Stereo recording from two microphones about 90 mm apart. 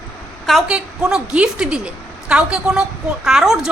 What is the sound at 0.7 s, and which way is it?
A woman's voice, 10° right (ahead or behind).